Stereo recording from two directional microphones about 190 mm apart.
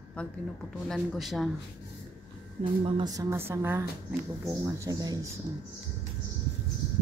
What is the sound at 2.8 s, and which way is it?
Speech, 25° right (ahead or behind).